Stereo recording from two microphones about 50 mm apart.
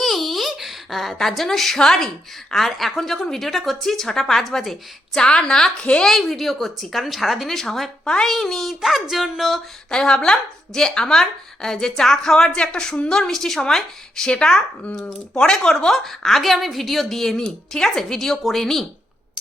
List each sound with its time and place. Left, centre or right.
0.0 s a sound: centre
2.5 s a woman's voice: centre
5.2 s a woman's voice: centre
5.8 s a woman's voice: left
6.1 s a woman's voice: centre
9.9 s a woman's voice: centre